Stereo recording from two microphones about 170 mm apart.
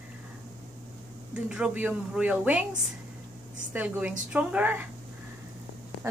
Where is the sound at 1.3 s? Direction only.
10° right (ahead or behind).